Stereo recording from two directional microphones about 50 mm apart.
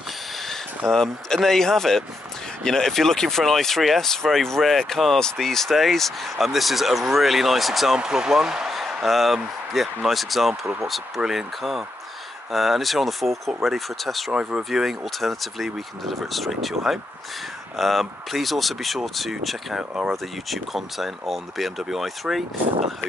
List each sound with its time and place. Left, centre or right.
0.5 s speech: centre
8.0 s speech: centre
14.3 s speech: right
14.6 s speech: centre